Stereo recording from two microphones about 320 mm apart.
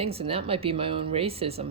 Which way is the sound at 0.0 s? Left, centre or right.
Centre.